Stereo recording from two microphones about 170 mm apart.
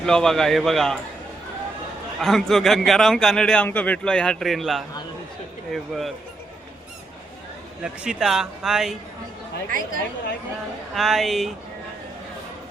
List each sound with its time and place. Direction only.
0.0 s a man's voice: 5° left (ahead or behind)
2.2 s a man's voice: centre (ahead or behind)
8.0 s a man's voice: centre (ahead or behind)
9.6 s a woman's voice: 55° right (ahead or behind)
10.9 s a man's voice: centre (ahead or behind)